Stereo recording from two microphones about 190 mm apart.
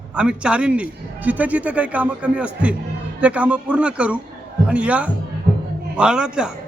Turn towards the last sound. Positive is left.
turn(degrees=-5)  # may be behind; listen again after turning